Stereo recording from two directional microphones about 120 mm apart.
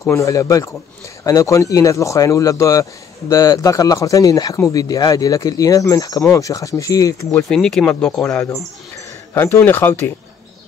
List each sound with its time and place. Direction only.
0.0 s speech: 25° left (ahead or behind)
7.4 s speech: 5° left (ahead or behind)